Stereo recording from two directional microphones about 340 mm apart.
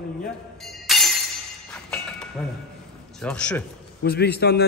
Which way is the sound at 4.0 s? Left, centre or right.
Left.